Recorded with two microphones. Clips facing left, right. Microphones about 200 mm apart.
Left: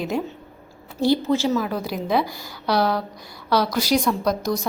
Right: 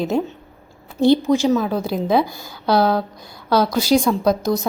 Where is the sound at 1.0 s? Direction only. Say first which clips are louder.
Right 5 dB; 20° right (ahead or behind).